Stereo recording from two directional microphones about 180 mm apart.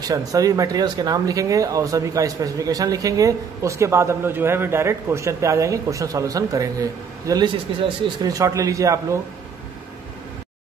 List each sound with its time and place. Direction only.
0.1 s a man's voice: 20° right (ahead or behind)